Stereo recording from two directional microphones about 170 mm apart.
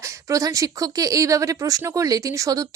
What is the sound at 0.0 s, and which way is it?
Speech, 15° right (ahead or behind).